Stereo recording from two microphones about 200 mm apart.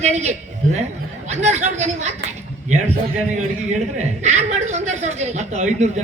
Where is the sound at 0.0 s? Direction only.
35° right (ahead or behind).